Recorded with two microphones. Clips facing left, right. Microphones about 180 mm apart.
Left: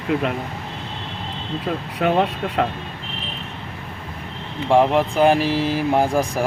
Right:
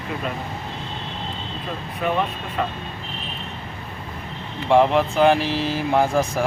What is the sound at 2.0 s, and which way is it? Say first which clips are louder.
Speech: left 4 dB; 75° left (ahead or behind).